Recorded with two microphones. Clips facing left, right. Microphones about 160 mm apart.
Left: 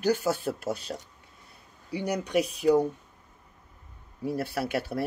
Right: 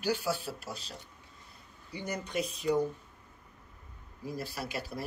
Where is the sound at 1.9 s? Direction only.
70° left (ahead or behind).